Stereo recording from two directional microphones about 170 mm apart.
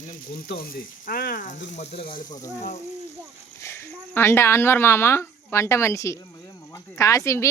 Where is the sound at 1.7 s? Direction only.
40° left (ahead or behind).